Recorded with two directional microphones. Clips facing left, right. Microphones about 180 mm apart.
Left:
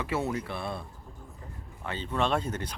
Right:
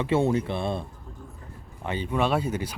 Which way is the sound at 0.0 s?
25° right (ahead or behind).